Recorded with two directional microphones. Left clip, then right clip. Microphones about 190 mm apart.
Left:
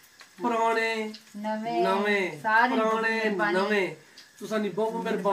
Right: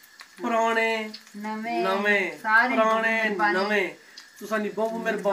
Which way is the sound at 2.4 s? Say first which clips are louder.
Right 1 dB; 20° left (ahead or behind).